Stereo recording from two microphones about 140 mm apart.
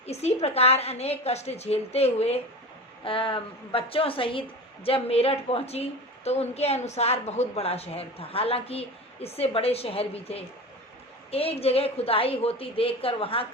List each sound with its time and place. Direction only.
0.0 s a woman's voice: 50° left (ahead or behind)